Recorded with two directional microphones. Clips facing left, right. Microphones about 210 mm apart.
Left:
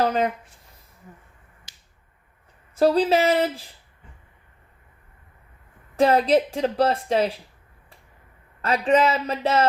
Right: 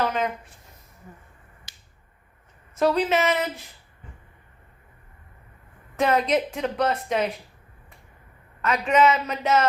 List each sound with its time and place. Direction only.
0.0 s speech: 35° left (ahead or behind)
2.7 s a woman's voice: 35° left (ahead or behind)
6.0 s a woman's voice: 30° left (ahead or behind)
8.6 s a woman's voice: 30° left (ahead or behind)